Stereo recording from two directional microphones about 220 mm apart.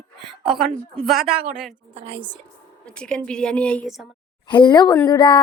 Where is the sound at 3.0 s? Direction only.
5° left (ahead or behind).